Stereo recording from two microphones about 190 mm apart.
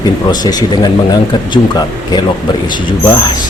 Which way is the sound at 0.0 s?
20° left (ahead or behind).